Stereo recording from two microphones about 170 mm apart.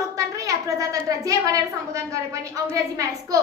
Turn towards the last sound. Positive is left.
turn(degrees=-20)  # may be behind; listen again after turning